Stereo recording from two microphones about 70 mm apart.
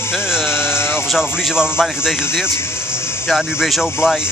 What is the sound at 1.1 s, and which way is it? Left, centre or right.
A man's voice, centre.